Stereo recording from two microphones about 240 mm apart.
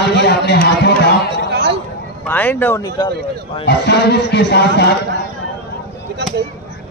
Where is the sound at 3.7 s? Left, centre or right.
Left.